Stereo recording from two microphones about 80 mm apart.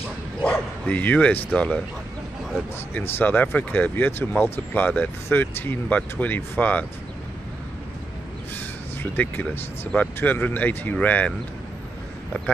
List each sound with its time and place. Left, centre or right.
0.4 s speech: centre
2.9 s speech: left
8.5 s speech: left